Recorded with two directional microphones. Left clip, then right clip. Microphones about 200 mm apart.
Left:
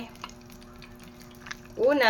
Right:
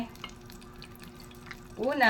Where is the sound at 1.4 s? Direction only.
35° left (ahead or behind).